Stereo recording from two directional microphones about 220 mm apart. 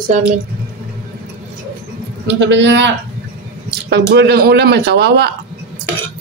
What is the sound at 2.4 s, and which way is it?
Speech, 55° right (ahead or behind).